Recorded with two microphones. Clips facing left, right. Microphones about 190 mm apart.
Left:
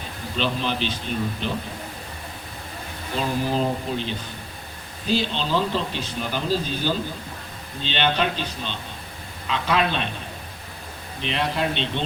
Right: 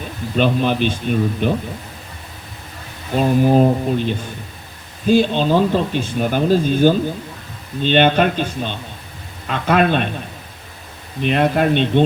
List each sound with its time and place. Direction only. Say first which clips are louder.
0.3 s speech: right 9 dB; 50° right (ahead or behind)
3.2 s speech: right 10 dB; 50° right (ahead or behind)
11.2 s speech: right 9 dB; 50° right (ahead or behind)